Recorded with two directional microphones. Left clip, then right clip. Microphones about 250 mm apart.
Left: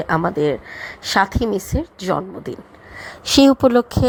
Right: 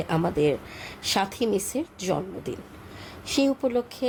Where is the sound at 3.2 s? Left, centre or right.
Left.